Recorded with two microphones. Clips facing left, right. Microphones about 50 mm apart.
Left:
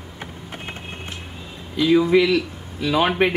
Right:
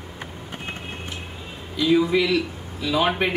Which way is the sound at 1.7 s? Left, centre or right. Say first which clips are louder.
Left 3 dB; centre.